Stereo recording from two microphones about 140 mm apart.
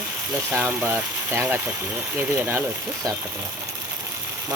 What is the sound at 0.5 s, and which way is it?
Speech, 10° right (ahead or behind).